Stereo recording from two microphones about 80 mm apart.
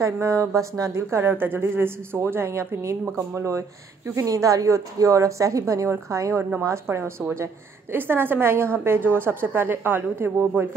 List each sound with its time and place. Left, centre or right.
0.0 s a woman's voice: right